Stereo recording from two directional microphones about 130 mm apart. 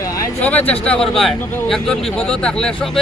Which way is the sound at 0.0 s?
25° left (ahead or behind).